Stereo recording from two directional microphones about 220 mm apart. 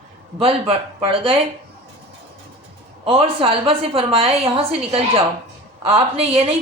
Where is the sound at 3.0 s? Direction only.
25° right (ahead or behind).